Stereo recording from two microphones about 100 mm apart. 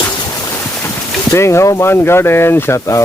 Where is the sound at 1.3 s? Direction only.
30° left (ahead or behind).